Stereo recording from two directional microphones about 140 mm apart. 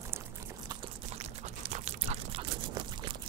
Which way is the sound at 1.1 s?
50° right (ahead or behind).